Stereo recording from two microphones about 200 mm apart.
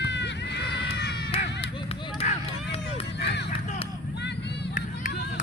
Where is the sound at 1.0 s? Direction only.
60° left (ahead or behind).